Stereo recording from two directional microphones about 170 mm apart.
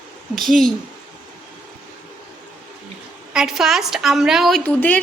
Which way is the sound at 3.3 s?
5° right (ahead or behind).